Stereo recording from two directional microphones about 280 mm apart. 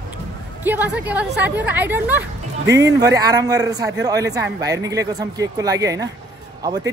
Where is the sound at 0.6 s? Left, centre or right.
Centre.